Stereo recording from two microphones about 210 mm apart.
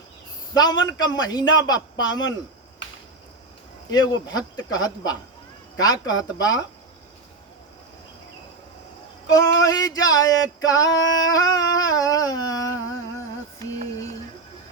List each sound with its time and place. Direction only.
0.5 s a man's voice: 20° left (ahead or behind)
3.9 s a man's voice: 20° left (ahead or behind)
5.8 s male singing: 20° left (ahead or behind)
9.6 s male singing: 15° left (ahead or behind)
13.7 s a sound: 15° left (ahead or behind)